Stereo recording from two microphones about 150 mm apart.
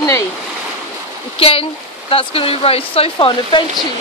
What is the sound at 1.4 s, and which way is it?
Speech, 40° left (ahead or behind).